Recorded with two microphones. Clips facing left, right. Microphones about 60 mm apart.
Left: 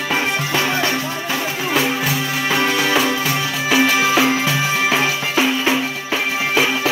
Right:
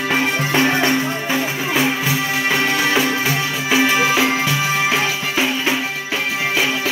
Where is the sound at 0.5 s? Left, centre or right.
Right.